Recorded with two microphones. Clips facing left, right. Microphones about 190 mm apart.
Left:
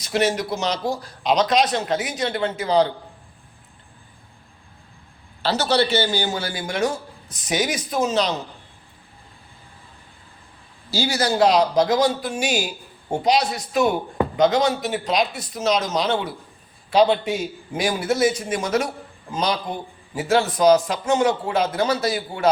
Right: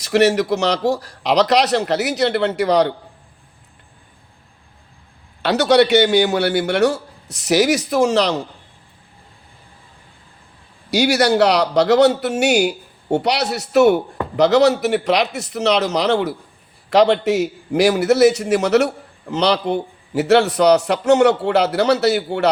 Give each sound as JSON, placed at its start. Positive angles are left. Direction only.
{"t": 0.0, "sound": "a man's voice", "side_deg": -70}
{"t": 5.4, "sound": "a man's voice", "side_deg": -65}
{"t": 10.9, "sound": "a man's voice", "side_deg": -70}